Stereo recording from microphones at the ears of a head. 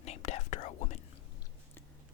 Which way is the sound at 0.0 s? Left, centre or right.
Left.